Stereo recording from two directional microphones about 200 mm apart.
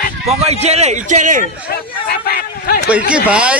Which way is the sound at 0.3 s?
35° right (ahead or behind).